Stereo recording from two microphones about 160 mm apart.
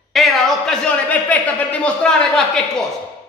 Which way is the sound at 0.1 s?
Centre (ahead or behind).